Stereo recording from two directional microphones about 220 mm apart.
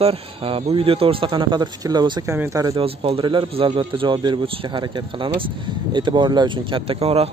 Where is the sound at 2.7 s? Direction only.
25° right (ahead or behind).